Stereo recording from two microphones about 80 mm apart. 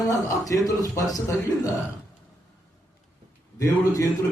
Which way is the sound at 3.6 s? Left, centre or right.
Left.